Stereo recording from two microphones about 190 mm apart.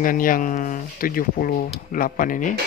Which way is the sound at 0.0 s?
45° left (ahead or behind).